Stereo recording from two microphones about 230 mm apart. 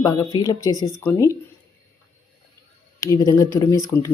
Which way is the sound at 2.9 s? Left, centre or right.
Centre.